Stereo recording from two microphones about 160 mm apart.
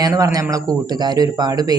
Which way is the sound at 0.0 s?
20° right (ahead or behind).